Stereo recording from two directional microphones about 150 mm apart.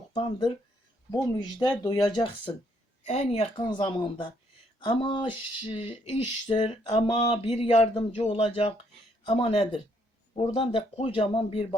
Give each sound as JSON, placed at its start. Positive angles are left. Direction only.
{"t": 0.1, "sound": "speech", "side_deg": 35}
{"t": 3.1, "sound": "speech", "side_deg": 45}
{"t": 3.7, "sound": "speech", "side_deg": 35}